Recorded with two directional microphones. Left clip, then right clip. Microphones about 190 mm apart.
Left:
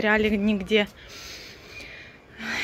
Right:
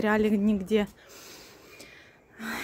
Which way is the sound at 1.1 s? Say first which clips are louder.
Left 7 dB; 35° right (ahead or behind).